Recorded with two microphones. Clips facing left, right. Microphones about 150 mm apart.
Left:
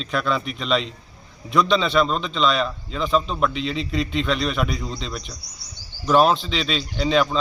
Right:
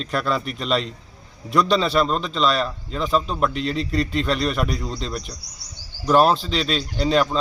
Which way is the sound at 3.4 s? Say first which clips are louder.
Right 1 dB; 45° right (ahead or behind).